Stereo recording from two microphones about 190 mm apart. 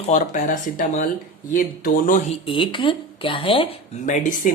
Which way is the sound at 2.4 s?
25° left (ahead or behind).